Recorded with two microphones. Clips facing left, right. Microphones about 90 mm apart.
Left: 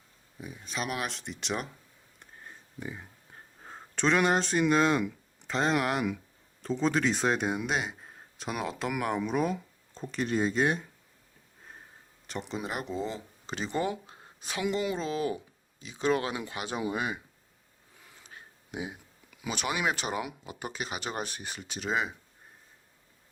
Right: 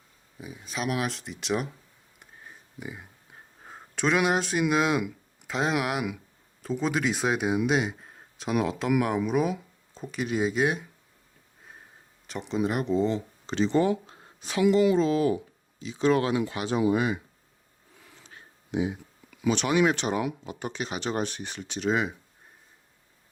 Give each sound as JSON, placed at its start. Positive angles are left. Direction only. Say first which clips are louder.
{"t": 0.3, "sound": "speech", "louder": "right 2 dB", "side_deg": 0}
{"t": 2.1, "sound": "a sound", "louder": "even", "side_deg": -5}
{"t": 6.6, "sound": "speech", "louder": "even", "side_deg": -5}
{"t": 12.3, "sound": "speech", "louder": "right 7 dB", "side_deg": 0}
{"t": 14.8, "sound": "speech", "louder": "right 9 dB", "side_deg": 25}
{"t": 18.7, "sound": "speech", "louder": "right 9 dB", "side_deg": 10}